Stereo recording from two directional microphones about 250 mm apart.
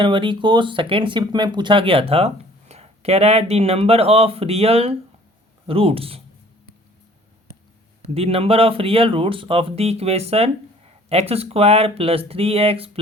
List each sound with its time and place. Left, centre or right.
0.0 s speech: centre
8.0 s speech: right